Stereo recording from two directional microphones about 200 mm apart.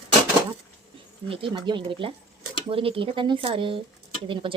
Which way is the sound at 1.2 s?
25° right (ahead or behind).